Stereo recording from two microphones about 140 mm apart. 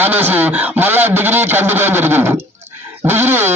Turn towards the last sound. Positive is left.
turn(degrees=-15)  # may be behind; listen again after turning